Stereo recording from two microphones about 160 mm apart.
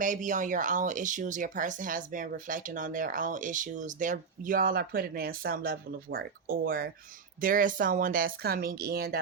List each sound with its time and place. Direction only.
0.0 s speech: 55° right (ahead or behind); by 9.1 s 75° right (ahead or behind)